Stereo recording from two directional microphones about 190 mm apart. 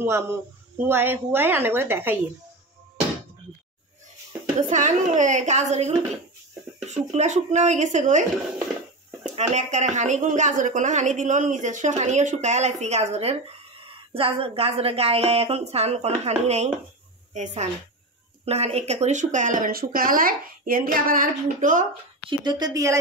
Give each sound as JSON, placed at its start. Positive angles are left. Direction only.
{"t": 0.0, "sound": "a woman's voice", "side_deg": -15}
{"t": 4.6, "sound": "speech", "side_deg": -40}
{"t": 22.4, "sound": "speech", "side_deg": -20}